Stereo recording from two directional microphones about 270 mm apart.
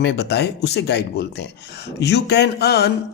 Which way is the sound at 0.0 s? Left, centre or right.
Left.